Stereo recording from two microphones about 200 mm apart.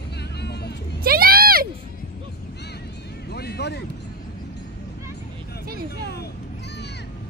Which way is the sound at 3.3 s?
55° left (ahead or behind).